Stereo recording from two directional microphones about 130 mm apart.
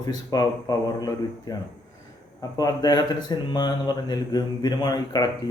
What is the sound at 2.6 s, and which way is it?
Speech, 30° left (ahead or behind).